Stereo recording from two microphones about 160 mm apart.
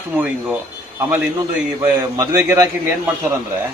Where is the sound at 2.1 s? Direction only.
20° right (ahead or behind).